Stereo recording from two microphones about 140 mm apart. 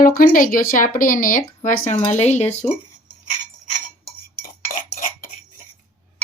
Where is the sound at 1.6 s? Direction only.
65° left (ahead or behind).